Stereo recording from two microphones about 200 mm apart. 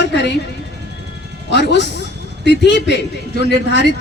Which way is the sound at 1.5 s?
60° left (ahead or behind).